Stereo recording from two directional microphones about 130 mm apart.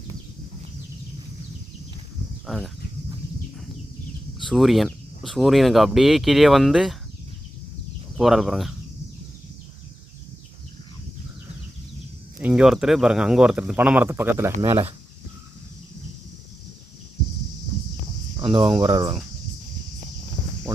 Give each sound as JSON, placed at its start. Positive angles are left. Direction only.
{"t": 2.5, "sound": "speech", "side_deg": 5}
{"t": 4.4, "sound": "speech", "side_deg": 0}
{"t": 8.1, "sound": "speech", "side_deg": 0}
{"t": 12.4, "sound": "speech", "side_deg": -10}
{"t": 18.4, "sound": "speech", "side_deg": -40}